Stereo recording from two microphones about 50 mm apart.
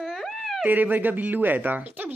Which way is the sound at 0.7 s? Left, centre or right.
Right.